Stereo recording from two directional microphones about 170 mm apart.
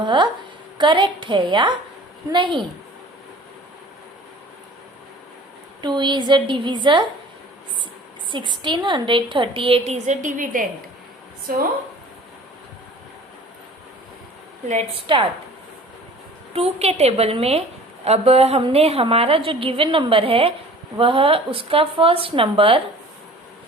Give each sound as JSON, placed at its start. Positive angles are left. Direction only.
{"t": 0.0, "sound": "a sound", "side_deg": -25}
{"t": 0.8, "sound": "a woman's voice", "side_deg": -30}
{"t": 5.8, "sound": "a woman's voice", "side_deg": -25}
{"t": 8.3, "sound": "a woman's voice", "side_deg": -30}
{"t": 14.7, "sound": "a woman's voice", "side_deg": -40}
{"t": 16.5, "sound": "a woman's voice", "side_deg": -35}